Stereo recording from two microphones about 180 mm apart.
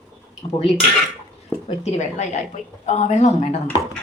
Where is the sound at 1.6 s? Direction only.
40° left (ahead or behind).